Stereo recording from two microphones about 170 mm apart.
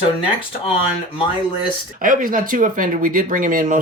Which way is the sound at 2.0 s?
55° right (ahead or behind).